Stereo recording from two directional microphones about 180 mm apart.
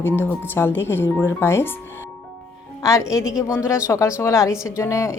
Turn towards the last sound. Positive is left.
turn(degrees=15)  # may be behind; listen again after turning